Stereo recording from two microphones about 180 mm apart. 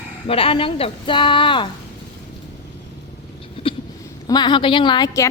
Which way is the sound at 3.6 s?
30° left (ahead or behind).